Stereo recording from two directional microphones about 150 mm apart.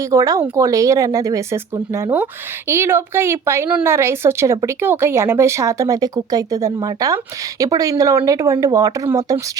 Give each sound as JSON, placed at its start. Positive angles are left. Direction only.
{"t": 0.0, "sound": "speech", "side_deg": -20}